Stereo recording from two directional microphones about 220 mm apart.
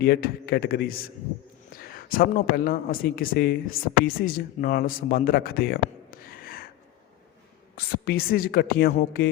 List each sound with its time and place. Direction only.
0.0 s a woman's voice: 45° left (ahead or behind)
7.8 s a woman's voice: 45° left (ahead or behind)